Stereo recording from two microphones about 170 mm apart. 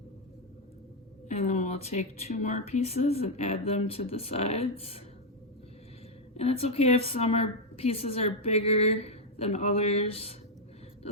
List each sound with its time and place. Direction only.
1.3 s a woman's voice: 40° left (ahead or behind)
6.3 s a woman's voice: 35° left (ahead or behind)